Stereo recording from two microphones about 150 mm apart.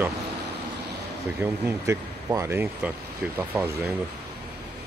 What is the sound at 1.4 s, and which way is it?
Speech, 15° right (ahead or behind).